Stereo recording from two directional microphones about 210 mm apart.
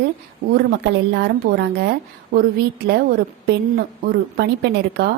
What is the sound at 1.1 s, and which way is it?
Speech, 50° right (ahead or behind).